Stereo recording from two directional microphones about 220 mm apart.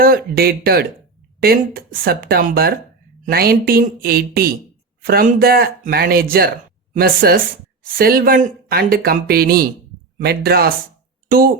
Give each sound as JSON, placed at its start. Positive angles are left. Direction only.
{"t": 0.0, "sound": "speech", "side_deg": -45}